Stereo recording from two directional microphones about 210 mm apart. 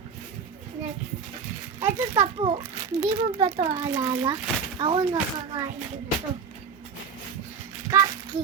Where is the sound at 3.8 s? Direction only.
20° right (ahead or behind).